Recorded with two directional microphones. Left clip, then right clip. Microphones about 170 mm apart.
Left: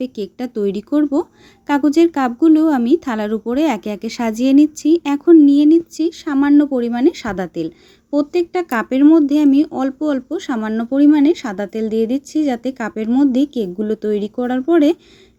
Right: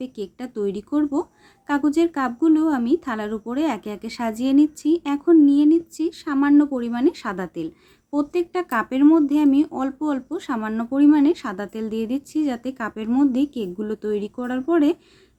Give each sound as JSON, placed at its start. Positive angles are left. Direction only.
{"t": 0.0, "sound": "speech", "side_deg": 35}